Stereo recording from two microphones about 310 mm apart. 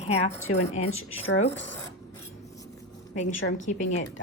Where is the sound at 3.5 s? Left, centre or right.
Left.